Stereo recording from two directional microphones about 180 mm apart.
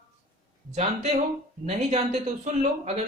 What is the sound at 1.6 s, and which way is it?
Speech, 35° right (ahead or behind).